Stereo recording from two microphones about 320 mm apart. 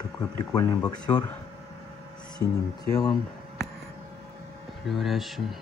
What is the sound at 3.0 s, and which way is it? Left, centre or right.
Speech, centre.